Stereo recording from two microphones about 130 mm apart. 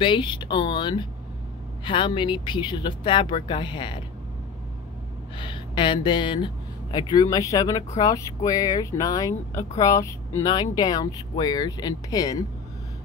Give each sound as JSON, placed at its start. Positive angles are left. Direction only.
{"t": 0.0, "sound": "speech", "side_deg": 35}
{"t": 5.4, "sound": "speech", "side_deg": 40}